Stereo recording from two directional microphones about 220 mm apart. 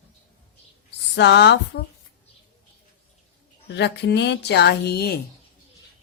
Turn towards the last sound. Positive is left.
turn(degrees=45)  # may be behind; listen again after turning